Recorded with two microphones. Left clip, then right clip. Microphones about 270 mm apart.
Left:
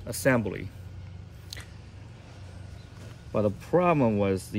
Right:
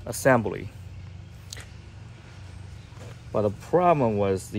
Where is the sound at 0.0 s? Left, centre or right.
Centre.